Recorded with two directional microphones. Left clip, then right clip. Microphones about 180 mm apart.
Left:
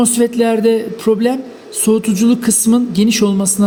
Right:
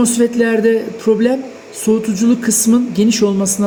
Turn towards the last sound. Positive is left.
turn(degrees=65)  # may be behind; listen again after turning